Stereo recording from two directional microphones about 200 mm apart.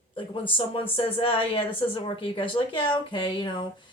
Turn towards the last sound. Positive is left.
turn(degrees=25)  # may be behind; listen again after turning